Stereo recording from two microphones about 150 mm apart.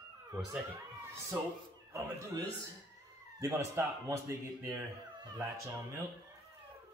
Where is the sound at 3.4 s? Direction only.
20° right (ahead or behind).